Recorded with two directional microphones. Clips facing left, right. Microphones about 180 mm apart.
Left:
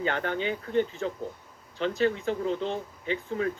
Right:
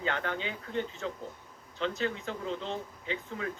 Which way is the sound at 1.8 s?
60° left (ahead or behind).